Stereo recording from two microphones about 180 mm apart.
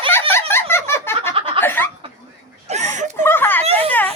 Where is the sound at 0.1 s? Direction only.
15° left (ahead or behind).